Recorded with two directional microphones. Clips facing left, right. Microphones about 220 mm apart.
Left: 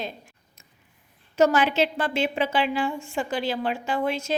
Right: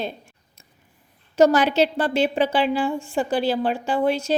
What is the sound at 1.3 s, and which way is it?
A woman's voice, 35° right (ahead or behind).